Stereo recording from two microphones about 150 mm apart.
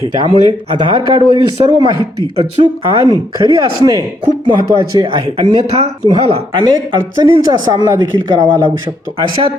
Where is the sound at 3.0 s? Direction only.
25° right (ahead or behind).